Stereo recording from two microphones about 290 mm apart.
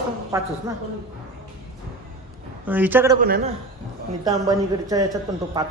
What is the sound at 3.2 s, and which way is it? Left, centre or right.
Speech, right.